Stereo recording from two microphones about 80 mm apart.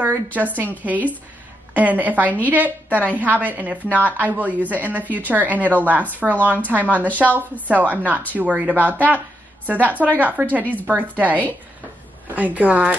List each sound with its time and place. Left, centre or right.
0.0 s a woman's voice: right
12.4 s a woman's voice: centre